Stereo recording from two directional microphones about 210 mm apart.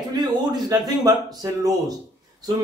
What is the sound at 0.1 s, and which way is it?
Speech, 20° right (ahead or behind).